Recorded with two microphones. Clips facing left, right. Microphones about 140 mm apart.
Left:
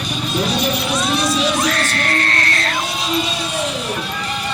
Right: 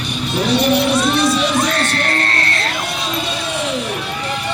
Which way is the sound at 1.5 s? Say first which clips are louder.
Right 2 dB; 25° right (ahead or behind).